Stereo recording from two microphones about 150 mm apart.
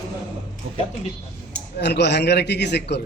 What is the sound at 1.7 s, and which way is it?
A man's voice, 90° left.